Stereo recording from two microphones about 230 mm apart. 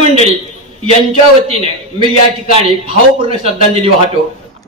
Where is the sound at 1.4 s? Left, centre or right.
Right.